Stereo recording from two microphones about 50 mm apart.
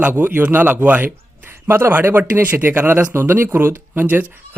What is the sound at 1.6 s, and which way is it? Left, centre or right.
Speech, right.